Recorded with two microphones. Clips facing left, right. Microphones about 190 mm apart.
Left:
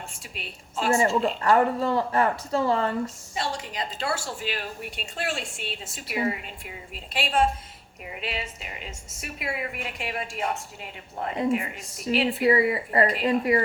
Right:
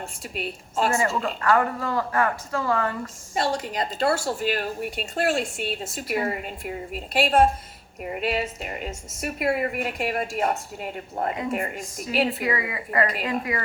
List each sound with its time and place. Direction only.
0.3 s a woman's voice: 45° right (ahead or behind)
0.9 s speech: 25° left (ahead or behind)
3.3 s a woman's voice: 40° right (ahead or behind)
12.4 s a woman's voice: 30° left (ahead or behind)